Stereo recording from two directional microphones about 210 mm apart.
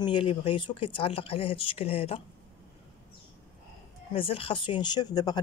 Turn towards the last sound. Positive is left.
turn(degrees=20)  # may be behind; listen again after turning